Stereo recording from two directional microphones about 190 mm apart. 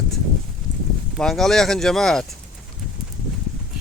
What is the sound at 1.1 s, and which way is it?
Speech, centre (ahead or behind).